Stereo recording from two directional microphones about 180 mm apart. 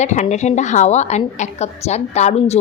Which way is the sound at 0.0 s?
40° left (ahead or behind).